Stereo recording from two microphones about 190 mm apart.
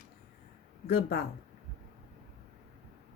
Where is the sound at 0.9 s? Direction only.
55° left (ahead or behind).